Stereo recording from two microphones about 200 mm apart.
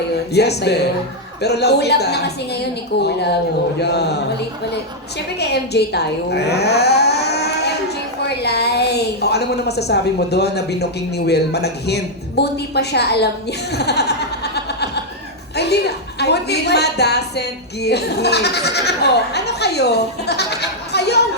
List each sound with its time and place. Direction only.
0.3 s a woman's voice: 55° left (ahead or behind)